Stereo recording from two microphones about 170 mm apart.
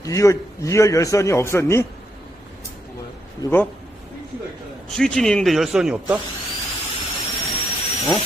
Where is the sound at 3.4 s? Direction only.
10° left (ahead or behind).